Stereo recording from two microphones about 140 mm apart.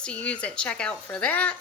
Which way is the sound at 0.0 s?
10° left (ahead or behind).